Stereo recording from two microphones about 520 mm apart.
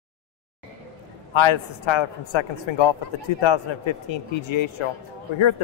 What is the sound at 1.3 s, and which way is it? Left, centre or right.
A man's voice, left.